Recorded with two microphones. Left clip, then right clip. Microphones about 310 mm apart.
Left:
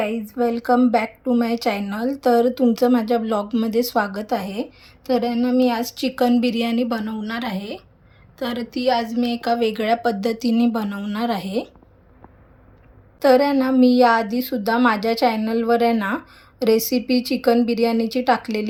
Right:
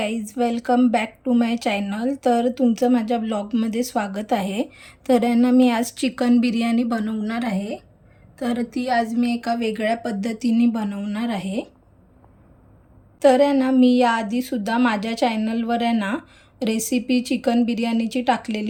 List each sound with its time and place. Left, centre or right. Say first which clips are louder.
0.3 s a woman's voice: left 2 dB; centre
0.6 s a woman's voice: left 2 dB; centre
13.1 s a woman's voice: even; centre